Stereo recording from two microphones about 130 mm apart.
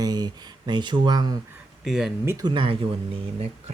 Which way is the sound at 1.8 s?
5° right (ahead or behind).